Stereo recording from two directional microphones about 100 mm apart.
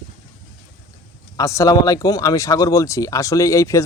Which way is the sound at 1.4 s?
35° left (ahead or behind).